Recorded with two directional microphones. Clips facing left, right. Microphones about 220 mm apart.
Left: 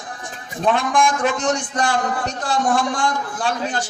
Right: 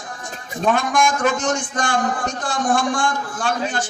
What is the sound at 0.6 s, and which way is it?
A man's voice, 35° left (ahead or behind).